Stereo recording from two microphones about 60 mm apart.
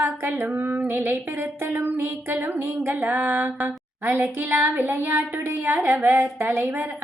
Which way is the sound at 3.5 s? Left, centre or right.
Centre.